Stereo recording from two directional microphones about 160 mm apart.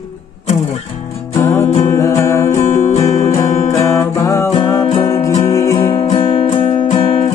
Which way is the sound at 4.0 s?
20° left (ahead or behind).